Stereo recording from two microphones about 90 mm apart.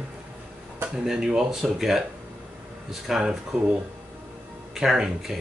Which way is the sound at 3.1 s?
5° right (ahead or behind).